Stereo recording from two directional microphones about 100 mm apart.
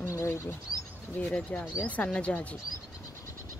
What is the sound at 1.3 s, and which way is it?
Speech, 10° left (ahead or behind).